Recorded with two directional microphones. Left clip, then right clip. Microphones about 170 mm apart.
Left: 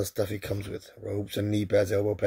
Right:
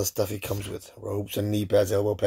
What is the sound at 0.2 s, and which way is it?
Speech, 20° right (ahead or behind).